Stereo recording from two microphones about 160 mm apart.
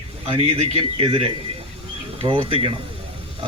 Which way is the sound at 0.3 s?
35° right (ahead or behind).